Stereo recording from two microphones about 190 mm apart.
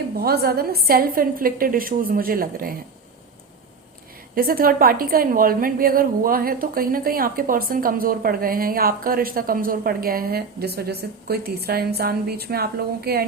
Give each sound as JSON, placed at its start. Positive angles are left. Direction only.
{"t": 0.2, "sound": "a woman's voice", "side_deg": -55}
{"t": 4.4, "sound": "a woman's voice", "side_deg": -50}